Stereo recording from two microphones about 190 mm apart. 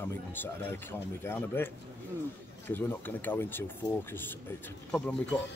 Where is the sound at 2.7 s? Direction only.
10° left (ahead or behind).